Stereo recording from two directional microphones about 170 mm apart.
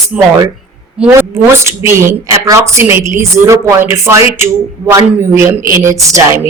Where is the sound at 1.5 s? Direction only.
15° right (ahead or behind).